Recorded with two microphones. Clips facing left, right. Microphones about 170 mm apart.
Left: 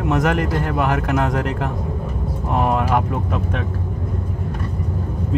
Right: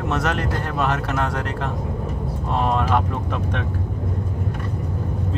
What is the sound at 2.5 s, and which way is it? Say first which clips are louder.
Speech: left 2 dB; 10° left (ahead or behind).